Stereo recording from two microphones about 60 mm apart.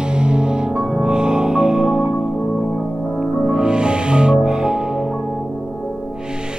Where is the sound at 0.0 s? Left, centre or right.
Centre.